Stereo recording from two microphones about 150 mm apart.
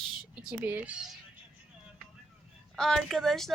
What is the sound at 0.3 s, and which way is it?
Speech, 10° right (ahead or behind).